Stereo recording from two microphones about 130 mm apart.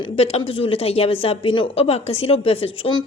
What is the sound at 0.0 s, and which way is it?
Speech, 50° left (ahead or behind).